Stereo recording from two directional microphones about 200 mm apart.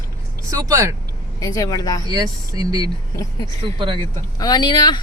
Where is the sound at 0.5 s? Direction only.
15° right (ahead or behind).